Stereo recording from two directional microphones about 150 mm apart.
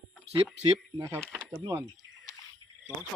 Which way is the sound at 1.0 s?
15° right (ahead or behind).